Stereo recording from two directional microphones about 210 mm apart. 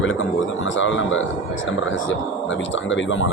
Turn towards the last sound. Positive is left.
turn(degrees=65)  # may be behind; listen again after turning